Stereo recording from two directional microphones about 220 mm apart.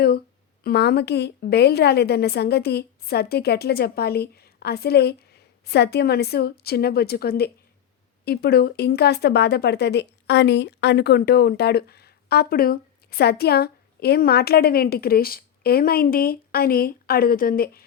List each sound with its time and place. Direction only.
0.6 s speech: 45° left (ahead or behind)